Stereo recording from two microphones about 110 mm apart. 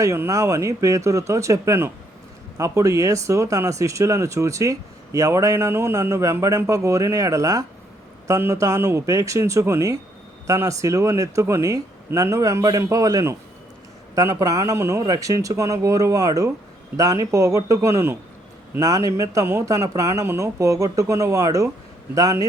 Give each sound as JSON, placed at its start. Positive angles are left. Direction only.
{"t": 0.0, "sound": "speech", "side_deg": -25}